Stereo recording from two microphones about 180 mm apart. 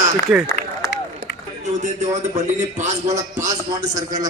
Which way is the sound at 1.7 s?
40° right (ahead or behind).